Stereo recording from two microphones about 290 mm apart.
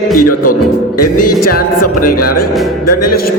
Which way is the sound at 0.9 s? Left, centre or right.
Left.